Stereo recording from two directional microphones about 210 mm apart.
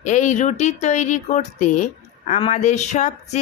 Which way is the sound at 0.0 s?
35° left (ahead or behind).